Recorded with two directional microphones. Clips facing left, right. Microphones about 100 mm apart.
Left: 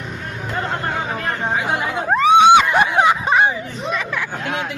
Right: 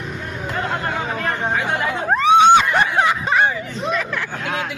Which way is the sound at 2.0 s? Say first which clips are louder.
Left 1 dB; centre (ahead or behind).